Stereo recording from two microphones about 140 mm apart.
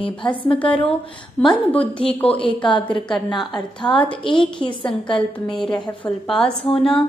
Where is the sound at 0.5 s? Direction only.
10° left (ahead or behind).